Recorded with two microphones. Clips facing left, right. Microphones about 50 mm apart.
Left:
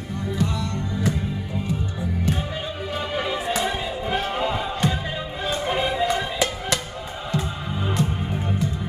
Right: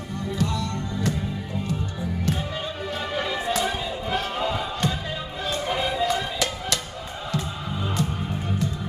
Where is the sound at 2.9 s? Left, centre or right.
Centre.